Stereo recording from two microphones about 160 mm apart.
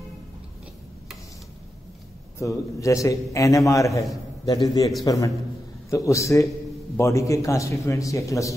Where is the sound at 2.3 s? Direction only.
20° left (ahead or behind).